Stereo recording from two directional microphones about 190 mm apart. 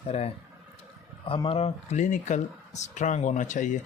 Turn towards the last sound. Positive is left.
turn(degrees=40)  # may be behind; listen again after turning